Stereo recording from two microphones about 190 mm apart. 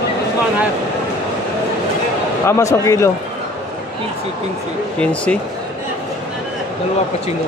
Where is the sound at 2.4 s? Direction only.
15° left (ahead or behind).